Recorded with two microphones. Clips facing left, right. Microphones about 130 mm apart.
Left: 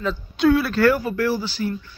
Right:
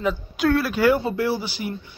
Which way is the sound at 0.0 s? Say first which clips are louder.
Left 1 dB; 15° right (ahead or behind).